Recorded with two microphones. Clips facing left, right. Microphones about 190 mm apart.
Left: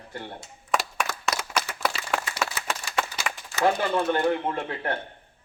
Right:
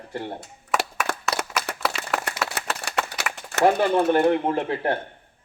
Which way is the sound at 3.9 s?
30° right (ahead or behind).